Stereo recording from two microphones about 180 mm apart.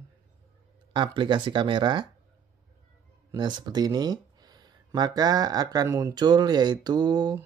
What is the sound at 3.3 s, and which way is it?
Speech, 25° right (ahead or behind).